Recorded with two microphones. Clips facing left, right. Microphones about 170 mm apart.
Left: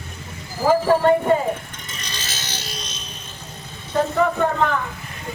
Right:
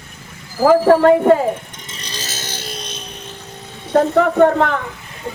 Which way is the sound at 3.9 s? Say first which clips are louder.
Right 6 dB; 65° right (ahead or behind).